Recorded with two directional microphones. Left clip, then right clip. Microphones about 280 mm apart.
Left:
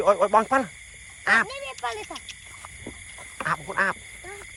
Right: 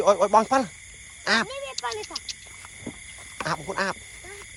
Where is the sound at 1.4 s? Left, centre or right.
Left.